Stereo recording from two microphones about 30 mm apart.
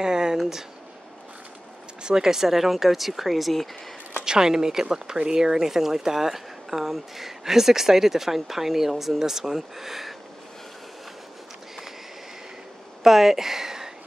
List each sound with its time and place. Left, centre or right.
0.0 s a sound: right
2.0 s speech: centre
4.2 s speech: right
13.0 s speech: centre